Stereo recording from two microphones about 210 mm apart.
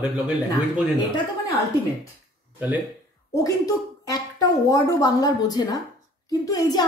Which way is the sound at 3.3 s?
15° left (ahead or behind).